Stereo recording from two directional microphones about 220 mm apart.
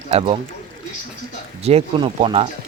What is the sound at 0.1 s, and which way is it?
Speech, 25° right (ahead or behind).